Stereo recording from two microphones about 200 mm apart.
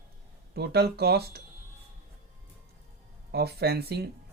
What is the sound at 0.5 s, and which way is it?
Speech, 55° right (ahead or behind).